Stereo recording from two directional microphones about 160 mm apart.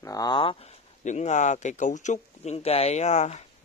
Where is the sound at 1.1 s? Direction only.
45° left (ahead or behind).